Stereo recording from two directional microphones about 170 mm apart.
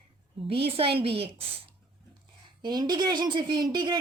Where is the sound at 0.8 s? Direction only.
30° right (ahead or behind).